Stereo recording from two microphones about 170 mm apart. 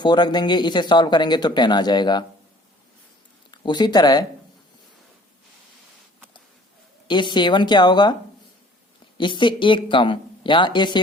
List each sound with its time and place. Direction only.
0.0 s speech: 25° left (ahead or behind)
3.5 s speech: 25° left (ahead or behind)
7.1 s speech: 25° left (ahead or behind)
9.1 s speech: 30° left (ahead or behind)